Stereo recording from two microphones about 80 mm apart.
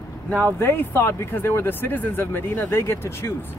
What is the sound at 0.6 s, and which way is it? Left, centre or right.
Speech, left.